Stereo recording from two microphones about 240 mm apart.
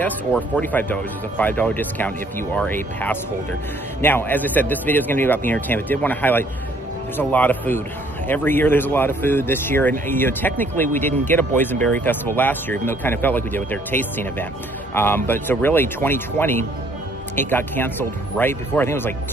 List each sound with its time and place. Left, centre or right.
0.0 s speech: centre